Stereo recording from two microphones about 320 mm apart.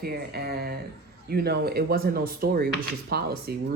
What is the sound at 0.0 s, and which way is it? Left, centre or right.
Speech, right.